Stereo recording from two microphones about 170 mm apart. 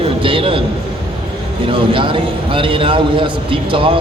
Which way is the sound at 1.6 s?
30° right (ahead or behind).